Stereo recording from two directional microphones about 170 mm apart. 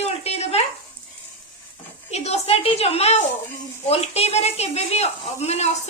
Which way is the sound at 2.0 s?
40° left (ahead or behind).